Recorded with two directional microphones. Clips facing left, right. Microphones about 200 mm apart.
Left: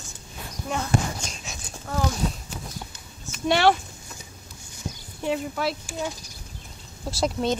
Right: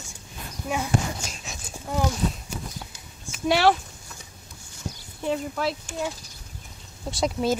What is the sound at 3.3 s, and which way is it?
Speech, centre (ahead or behind).